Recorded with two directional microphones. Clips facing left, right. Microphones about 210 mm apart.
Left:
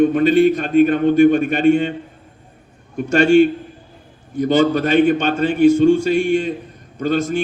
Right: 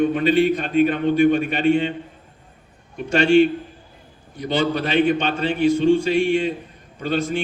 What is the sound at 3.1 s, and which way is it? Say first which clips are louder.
A man's voice: left 3 dB; 45° left (ahead or behind).